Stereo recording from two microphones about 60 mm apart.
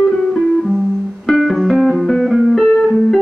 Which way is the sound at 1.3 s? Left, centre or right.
Centre.